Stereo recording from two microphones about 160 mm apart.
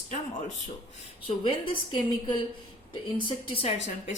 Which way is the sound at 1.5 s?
30° left (ahead or behind).